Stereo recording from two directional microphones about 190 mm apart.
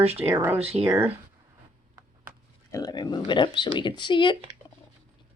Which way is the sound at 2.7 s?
20° left (ahead or behind).